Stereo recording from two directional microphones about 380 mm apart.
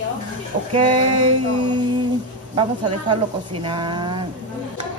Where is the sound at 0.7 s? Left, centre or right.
Centre.